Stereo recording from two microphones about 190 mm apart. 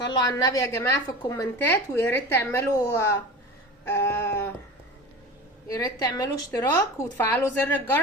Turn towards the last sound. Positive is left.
turn(degrees=10)  # may be behind; listen again after turning